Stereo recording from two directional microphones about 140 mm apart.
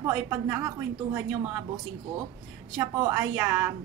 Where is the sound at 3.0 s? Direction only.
20° right (ahead or behind).